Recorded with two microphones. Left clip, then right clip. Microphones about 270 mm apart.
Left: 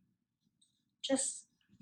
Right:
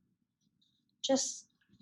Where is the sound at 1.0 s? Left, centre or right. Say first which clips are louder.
Right 4 dB; centre.